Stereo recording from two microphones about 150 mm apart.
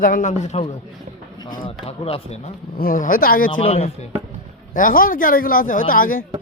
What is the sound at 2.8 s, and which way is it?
Speech, 70° left (ahead or behind).